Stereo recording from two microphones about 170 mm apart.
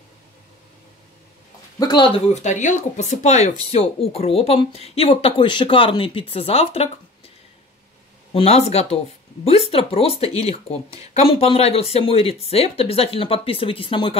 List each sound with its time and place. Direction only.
1.8 s speech: 25° left (ahead or behind)
2.3 s speech: 45° left (ahead or behind)
8.3 s speech: 35° left (ahead or behind)